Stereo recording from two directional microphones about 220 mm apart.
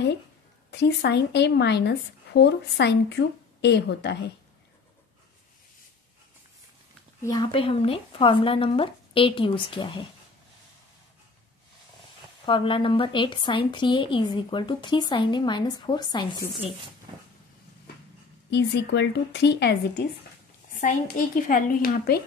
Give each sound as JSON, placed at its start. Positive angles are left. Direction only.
{"t": 0.7, "sound": "a woman's voice", "side_deg": 50}
{"t": 7.2, "sound": "a woman's voice", "side_deg": 20}
{"t": 12.4, "sound": "a woman's voice", "side_deg": 20}
{"t": 18.5, "sound": "a woman's voice", "side_deg": 50}
{"t": 21.5, "sound": "speech", "side_deg": 40}